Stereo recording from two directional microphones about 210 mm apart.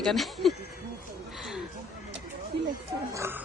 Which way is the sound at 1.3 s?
Centre (ahead or behind).